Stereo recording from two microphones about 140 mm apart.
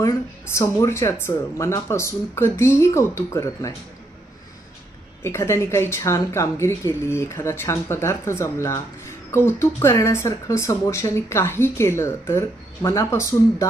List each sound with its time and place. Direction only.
0.5 s speech: 20° left (ahead or behind)
5.2 s speech: 20° left (ahead or behind)